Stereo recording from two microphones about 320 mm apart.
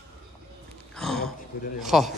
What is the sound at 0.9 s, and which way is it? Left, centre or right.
Gasp, centre.